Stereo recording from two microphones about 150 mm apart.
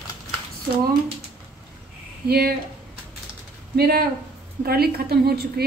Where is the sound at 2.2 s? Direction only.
90° right.